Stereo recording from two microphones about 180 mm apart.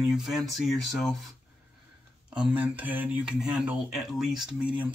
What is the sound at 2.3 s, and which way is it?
Speech, 10° right (ahead or behind).